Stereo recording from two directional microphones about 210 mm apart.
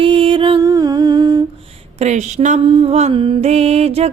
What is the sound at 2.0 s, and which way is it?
Music, 35° right (ahead or behind).